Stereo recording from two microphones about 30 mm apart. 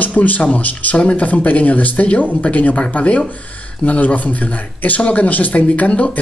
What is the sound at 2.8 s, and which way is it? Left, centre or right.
Speech, left.